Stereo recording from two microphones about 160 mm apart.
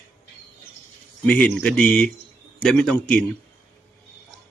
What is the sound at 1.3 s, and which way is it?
Speech, 5° left (ahead or behind).